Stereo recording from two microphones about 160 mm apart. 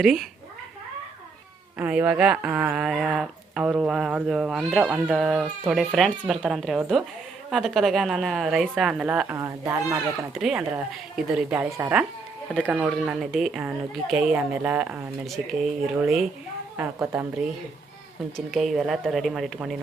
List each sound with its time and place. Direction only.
0.0 s speech: centre (ahead or behind)
1.8 s speech: 10° right (ahead or behind)
9.4 s speech: 20° right (ahead or behind)
10.3 s speech: 5° right (ahead or behind)
18.3 s speech: centre (ahead or behind)